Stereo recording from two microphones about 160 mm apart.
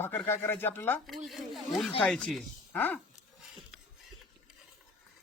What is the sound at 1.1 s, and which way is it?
Speech, centre (ahead or behind).